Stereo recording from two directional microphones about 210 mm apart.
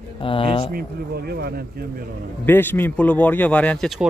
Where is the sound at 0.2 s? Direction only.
25° left (ahead or behind).